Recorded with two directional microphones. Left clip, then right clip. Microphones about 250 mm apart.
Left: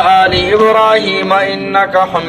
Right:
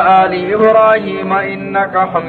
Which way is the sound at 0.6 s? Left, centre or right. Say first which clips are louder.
Right 2 dB; left.